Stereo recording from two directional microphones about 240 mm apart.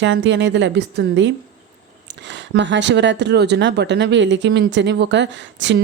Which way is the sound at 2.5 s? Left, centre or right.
Right.